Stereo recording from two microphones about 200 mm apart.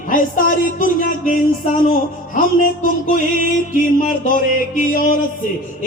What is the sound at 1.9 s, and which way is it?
Music, 45° left (ahead or behind).